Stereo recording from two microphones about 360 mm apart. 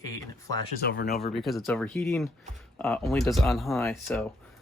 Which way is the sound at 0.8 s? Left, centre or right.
Left.